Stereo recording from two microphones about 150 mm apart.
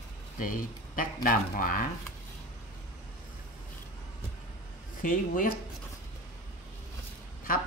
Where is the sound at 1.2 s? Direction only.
65° left (ahead or behind).